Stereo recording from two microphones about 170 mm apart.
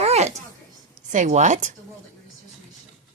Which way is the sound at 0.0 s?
40° right (ahead or behind).